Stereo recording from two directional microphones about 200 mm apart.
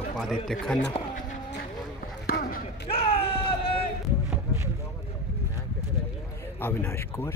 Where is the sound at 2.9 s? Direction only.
30° left (ahead or behind).